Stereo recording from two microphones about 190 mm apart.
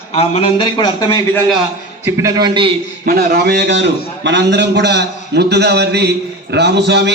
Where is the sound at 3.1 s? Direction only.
50° right (ahead or behind).